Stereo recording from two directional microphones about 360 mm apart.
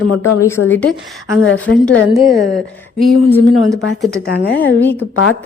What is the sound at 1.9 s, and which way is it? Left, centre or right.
Speech, centre.